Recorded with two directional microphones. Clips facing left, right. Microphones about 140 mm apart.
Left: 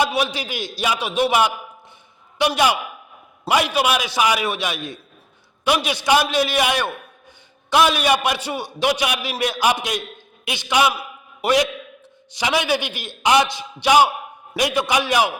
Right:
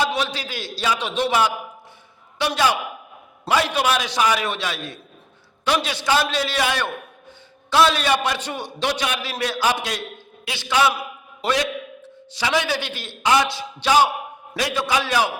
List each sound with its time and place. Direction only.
0.0 s a man's voice: 10° left (ahead or behind)